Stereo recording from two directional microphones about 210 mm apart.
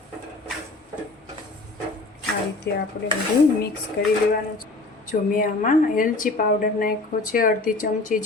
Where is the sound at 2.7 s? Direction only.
55° left (ahead or behind).